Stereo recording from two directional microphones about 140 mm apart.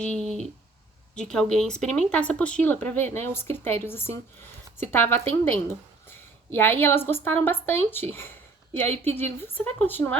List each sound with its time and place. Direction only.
0.0 s a woman's voice: 5° left (ahead or behind)